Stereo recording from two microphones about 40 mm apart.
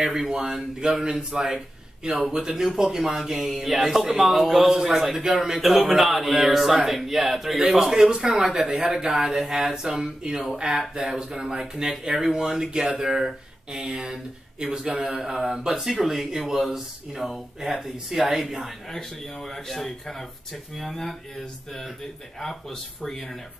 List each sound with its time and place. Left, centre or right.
0.0 s a man's voice: centre
17.9 s speech: centre
18.3 s a man's voice: centre
18.9 s speech: centre